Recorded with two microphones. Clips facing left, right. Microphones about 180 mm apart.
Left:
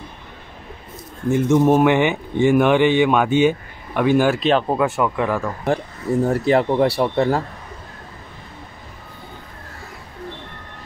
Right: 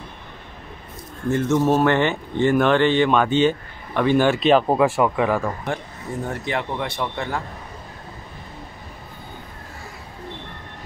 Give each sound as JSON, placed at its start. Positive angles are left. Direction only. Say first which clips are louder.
{"t": 1.3, "sound": "speech", "louder": "left 4 dB", "side_deg": 15}
{"t": 4.6, "sound": "speech", "louder": "right 1 dB", "side_deg": -15}
{"t": 6.2, "sound": "speech", "louder": "left 9 dB", "side_deg": 35}